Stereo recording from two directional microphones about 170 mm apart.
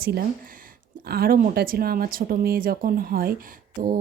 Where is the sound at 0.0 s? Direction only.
60° right (ahead or behind).